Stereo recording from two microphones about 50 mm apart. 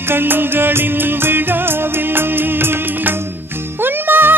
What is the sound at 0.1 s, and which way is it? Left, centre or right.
Music, right.